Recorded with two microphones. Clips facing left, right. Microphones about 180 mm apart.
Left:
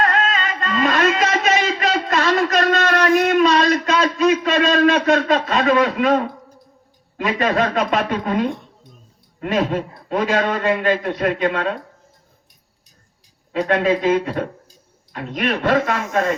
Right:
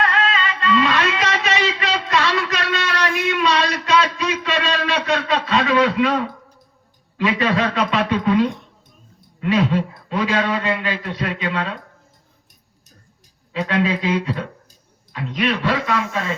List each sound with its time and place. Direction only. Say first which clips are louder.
0.0 s music: left 1 dB; 45° left (ahead or behind)
7.2 s a man's voice: left 1 dB; 45° left (ahead or behind)
13.5 s a man's voice: left 3 dB; 50° left (ahead or behind)